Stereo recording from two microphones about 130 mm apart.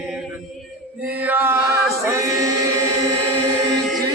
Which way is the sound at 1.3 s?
15° right (ahead or behind).